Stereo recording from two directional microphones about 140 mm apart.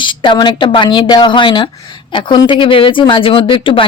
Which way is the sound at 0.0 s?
35° left (ahead or behind).